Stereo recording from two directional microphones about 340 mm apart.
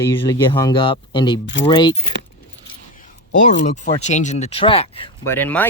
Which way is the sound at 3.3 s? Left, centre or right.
Left.